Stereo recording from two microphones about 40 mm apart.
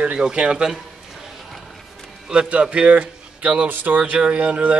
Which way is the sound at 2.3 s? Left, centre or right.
Right.